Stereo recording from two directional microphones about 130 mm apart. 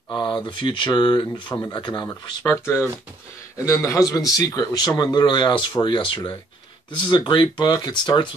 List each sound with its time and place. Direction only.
0.1 s a man's voice: 35° left (ahead or behind)
2.4 s a man's voice: 20° left (ahead or behind); by 8.3 s 35° left (ahead or behind)